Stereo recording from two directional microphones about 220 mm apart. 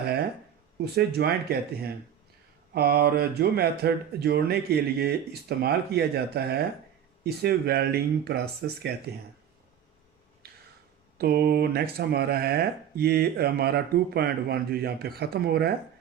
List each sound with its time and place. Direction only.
0.8 s speech: 45° right (ahead or behind)
10.4 s a sound: 45° right (ahead or behind)
11.2 s speech: 45° right (ahead or behind)